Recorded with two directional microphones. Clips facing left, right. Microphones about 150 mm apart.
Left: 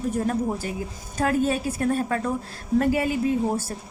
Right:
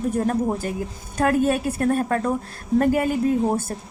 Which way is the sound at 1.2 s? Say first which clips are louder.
Right 3 dB; 55° right (ahead or behind).